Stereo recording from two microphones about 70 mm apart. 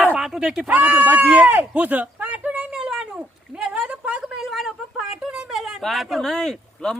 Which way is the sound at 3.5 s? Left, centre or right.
Centre.